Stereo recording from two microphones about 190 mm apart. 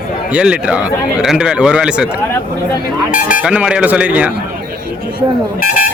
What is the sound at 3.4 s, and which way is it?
Speech, 5° right (ahead or behind).